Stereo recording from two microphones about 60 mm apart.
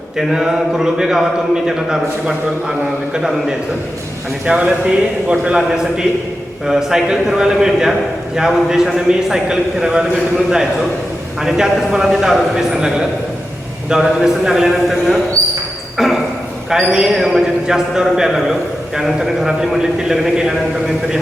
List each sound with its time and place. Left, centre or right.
0.2 s a man's voice: centre
13.9 s a man's voice: centre
16.6 s a man's voice: centre